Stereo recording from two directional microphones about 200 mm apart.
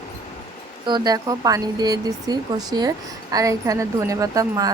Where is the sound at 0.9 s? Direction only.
20° right (ahead or behind).